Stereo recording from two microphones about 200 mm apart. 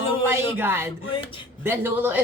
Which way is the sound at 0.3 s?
10° right (ahead or behind).